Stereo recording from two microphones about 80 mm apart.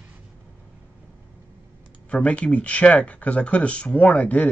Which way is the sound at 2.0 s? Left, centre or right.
Centre.